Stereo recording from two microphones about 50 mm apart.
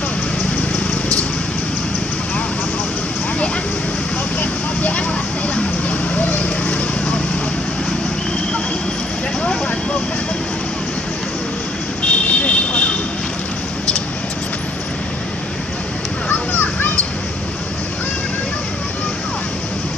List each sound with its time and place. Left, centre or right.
4.4 s vehicle: left
12.0 s vehicle: left
16.3 s a sound: left